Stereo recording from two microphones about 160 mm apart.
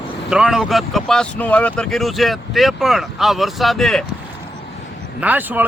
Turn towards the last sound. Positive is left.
turn(degrees=-10)  # may be behind; listen again after turning